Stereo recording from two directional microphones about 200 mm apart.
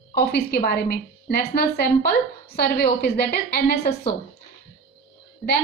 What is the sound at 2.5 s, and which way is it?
A woman's voice, 50° left (ahead or behind).